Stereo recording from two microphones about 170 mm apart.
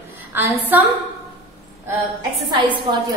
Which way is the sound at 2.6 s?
30° right (ahead or behind).